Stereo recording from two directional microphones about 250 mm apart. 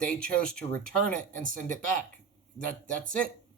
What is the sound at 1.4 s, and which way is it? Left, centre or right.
Speech, right.